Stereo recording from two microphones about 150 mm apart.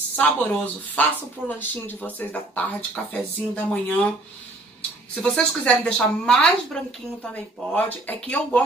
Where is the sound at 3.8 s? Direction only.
5° left (ahead or behind).